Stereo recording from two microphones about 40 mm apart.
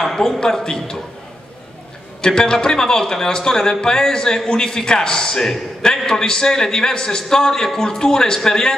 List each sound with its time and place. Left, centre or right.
0.0 s a man's voice: centre
2.2 s a man's voice: centre